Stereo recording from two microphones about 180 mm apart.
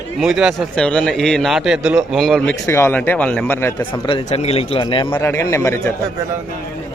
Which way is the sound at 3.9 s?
25° left (ahead or behind).